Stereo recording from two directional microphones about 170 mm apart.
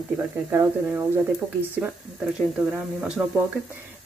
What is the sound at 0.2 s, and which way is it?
Speech, 10° right (ahead or behind).